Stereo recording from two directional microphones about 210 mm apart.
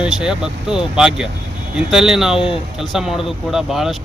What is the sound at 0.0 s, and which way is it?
Speech, 5° right (ahead or behind).